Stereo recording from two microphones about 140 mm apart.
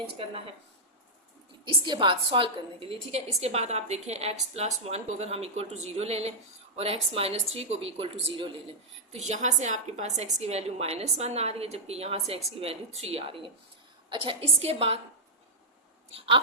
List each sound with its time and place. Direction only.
1.6 s a woman's voice: 35° right (ahead or behind)
9.1 s a woman's voice: 55° right (ahead or behind)